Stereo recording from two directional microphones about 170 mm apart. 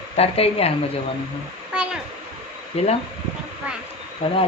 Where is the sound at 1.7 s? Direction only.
5° right (ahead or behind).